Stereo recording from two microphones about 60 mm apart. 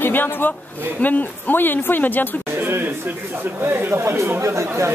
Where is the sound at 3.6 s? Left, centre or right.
Right.